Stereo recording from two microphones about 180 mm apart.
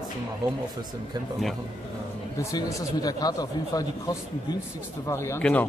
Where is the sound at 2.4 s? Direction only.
20° left (ahead or behind).